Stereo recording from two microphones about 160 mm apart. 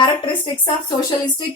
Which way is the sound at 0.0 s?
30° left (ahead or behind).